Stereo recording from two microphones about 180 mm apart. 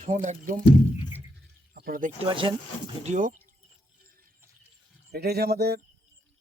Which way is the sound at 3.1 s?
45° right (ahead or behind).